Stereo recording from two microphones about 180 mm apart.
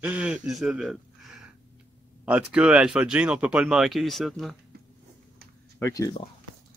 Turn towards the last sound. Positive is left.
turn(degrees=15)  # may be behind; listen again after turning